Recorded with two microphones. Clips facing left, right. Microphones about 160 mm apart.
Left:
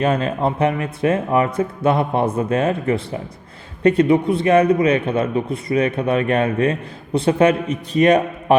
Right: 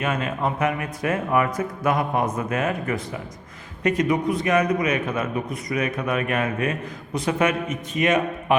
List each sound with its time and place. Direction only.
0.0 s a man's voice: 35° left (ahead or behind)